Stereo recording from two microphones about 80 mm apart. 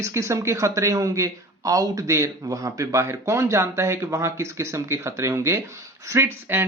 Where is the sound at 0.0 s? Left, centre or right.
Right.